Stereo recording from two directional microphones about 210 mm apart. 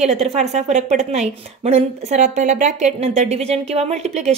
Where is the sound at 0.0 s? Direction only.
30° right (ahead or behind).